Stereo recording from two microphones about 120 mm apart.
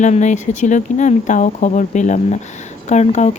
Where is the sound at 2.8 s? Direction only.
75° left (ahead or behind).